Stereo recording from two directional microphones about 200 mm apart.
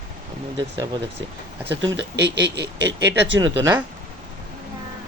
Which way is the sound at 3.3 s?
20° right (ahead or behind).